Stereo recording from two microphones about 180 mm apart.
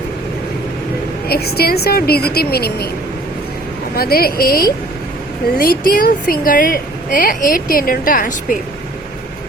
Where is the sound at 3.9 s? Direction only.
55° left (ahead or behind).